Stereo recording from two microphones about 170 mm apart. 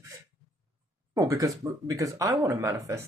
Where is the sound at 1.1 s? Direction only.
20° right (ahead or behind).